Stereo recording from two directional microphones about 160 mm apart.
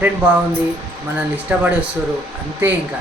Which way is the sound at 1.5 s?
10° right (ahead or behind).